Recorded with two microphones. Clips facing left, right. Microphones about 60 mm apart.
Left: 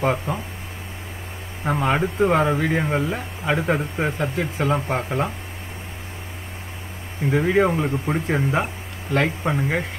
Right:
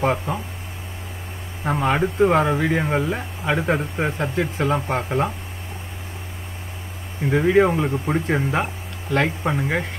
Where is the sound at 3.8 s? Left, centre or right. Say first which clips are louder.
Even; centre.